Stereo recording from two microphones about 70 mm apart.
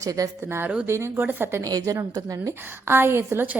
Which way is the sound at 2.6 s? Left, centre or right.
Right.